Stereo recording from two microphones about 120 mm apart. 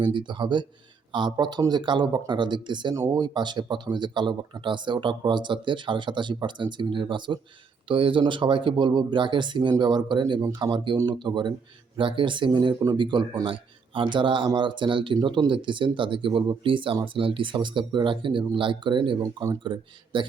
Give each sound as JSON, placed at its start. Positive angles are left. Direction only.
{"t": 0.0, "sound": "speech", "side_deg": -40}